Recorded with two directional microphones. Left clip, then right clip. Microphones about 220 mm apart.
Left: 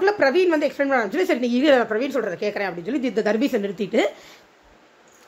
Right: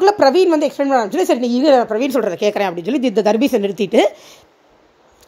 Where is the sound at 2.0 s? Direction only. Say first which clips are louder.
Right 6 dB; 35° right (ahead or behind).